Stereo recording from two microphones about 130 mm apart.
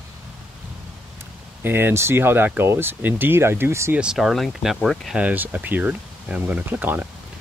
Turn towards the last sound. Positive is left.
turn(degrees=-10)  # may be behind; listen again after turning